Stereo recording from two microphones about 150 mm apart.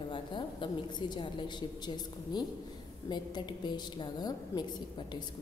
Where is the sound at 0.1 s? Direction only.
30° left (ahead or behind).